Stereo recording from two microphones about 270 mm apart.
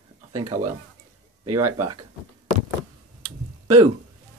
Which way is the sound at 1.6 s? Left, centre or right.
Right.